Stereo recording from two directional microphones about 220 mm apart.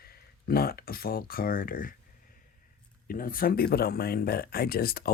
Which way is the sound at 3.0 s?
40° left (ahead or behind).